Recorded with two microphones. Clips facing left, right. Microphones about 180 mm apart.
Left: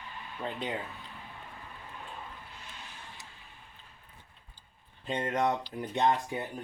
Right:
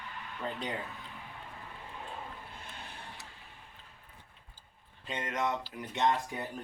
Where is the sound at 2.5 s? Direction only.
55° right (ahead or behind).